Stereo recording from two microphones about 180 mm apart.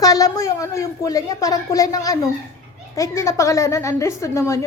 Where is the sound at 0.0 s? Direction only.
20° left (ahead or behind).